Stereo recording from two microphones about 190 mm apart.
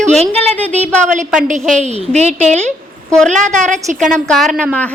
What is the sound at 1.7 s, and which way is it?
A woman's voice, 35° right (ahead or behind).